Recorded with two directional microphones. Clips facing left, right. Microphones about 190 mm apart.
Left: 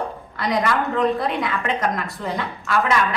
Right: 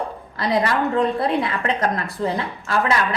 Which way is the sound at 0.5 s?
30° right (ahead or behind).